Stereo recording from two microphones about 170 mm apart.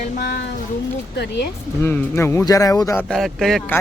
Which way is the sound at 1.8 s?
15° left (ahead or behind).